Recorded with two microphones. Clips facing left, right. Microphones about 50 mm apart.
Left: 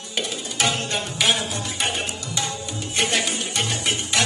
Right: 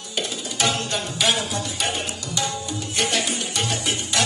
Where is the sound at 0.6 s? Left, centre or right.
Left.